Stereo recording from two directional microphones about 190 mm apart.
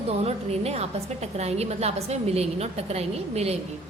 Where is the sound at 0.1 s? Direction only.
30° right (ahead or behind).